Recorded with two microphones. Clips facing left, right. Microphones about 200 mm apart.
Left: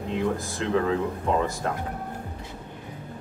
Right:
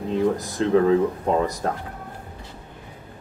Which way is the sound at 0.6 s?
35° right (ahead or behind).